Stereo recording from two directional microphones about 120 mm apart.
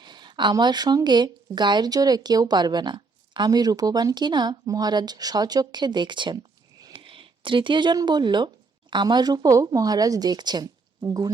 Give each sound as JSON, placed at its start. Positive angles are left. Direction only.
{"t": 0.0, "sound": "a woman's voice", "side_deg": -40}